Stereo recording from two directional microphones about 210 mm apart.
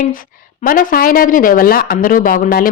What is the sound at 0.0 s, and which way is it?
A woman's voice, 40° left (ahead or behind).